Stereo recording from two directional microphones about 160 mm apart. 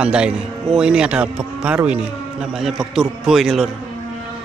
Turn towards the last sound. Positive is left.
turn(degrees=0)  # may be behind; listen again after turning